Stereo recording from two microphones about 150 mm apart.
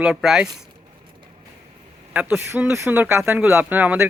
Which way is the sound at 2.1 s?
10° right (ahead or behind).